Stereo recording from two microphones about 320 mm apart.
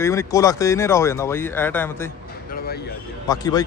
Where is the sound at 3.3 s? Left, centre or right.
Centre.